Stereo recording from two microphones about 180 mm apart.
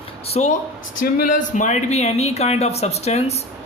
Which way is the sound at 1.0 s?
50° left (ahead or behind).